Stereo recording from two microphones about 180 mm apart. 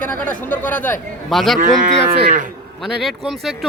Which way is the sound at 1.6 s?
45° right (ahead or behind).